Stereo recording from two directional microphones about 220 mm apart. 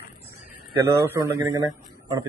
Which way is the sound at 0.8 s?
10° right (ahead or behind).